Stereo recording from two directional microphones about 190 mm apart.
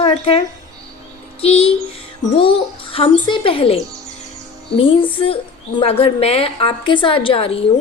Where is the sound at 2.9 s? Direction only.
30° left (ahead or behind).